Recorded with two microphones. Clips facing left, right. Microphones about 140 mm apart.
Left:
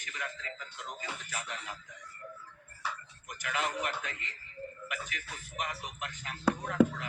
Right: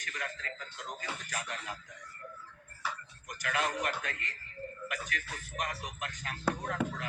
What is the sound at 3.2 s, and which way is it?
Speech, 40° right (ahead or behind).